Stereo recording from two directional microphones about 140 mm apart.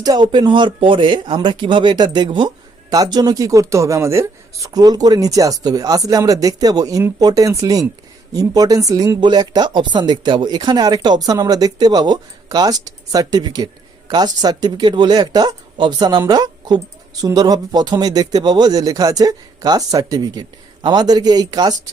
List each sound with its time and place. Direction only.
0.0 s speech: 30° right (ahead or behind)